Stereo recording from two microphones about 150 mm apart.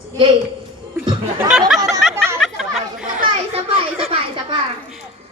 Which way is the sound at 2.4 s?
Centre (ahead or behind).